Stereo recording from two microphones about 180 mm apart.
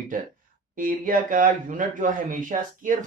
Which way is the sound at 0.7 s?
50° right (ahead or behind).